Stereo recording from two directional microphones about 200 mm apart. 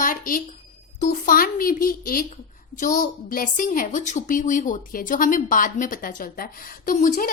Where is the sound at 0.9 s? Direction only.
40° left (ahead or behind).